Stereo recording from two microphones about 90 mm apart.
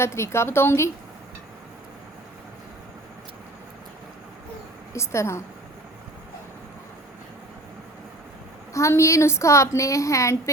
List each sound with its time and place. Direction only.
0.0 s a woman's voice: 30° left (ahead or behind)
4.9 s a woman's voice: 30° left (ahead or behind)
8.7 s a woman's voice: 35° left (ahead or behind)